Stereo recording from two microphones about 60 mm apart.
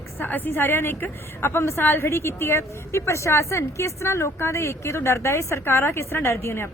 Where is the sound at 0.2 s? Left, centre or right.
Left.